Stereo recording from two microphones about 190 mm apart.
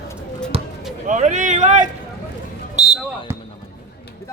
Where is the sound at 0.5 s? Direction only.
30° right (ahead or behind).